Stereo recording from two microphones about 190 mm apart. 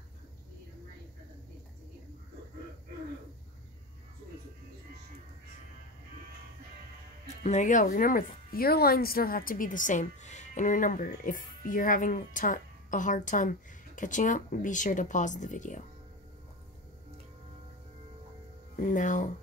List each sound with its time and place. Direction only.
7.4 s speech: 40° left (ahead or behind)
18.8 s speech: 45° left (ahead or behind)